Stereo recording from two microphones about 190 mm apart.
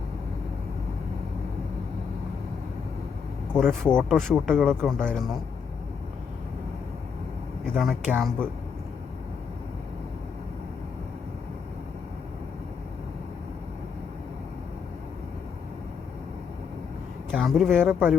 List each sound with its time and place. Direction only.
3.5 s speech: 5° left (ahead or behind)
7.6 s speech: centre (ahead or behind)
17.3 s speech: centre (ahead or behind)